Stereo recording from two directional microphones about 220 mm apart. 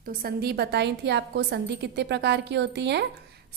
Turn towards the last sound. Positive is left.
turn(degrees=-50)  # may be behind; listen again after turning